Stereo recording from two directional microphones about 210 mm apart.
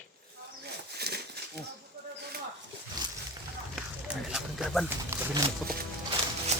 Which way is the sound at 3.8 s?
Centre (ahead or behind).